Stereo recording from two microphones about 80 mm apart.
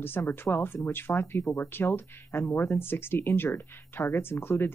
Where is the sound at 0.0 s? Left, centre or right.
Left.